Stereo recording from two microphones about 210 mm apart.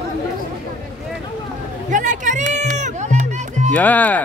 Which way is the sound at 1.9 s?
35° right (ahead or behind).